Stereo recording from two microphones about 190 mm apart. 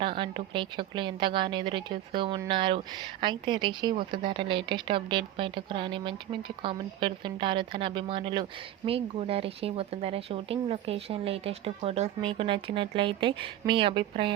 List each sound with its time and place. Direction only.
0.0 s a woman's voice: 25° right (ahead or behind)